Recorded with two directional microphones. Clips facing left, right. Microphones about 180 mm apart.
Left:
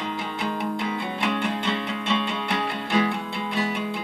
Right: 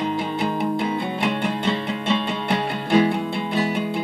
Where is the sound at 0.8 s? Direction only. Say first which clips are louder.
Right 4 dB; 35° right (ahead or behind).